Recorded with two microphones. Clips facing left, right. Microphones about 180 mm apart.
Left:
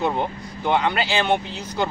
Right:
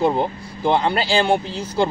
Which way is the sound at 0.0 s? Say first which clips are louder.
Right 4 dB; 35° right (ahead or behind).